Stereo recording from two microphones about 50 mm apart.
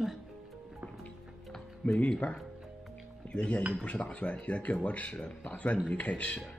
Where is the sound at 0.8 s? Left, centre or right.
Right.